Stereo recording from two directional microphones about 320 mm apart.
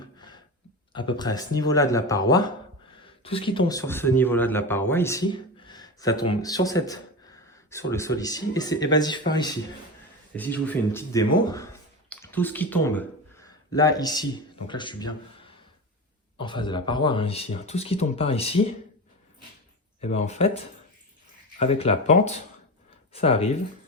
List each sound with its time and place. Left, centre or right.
0.9 s speech: centre
16.4 s speech: centre
20.0 s speech: left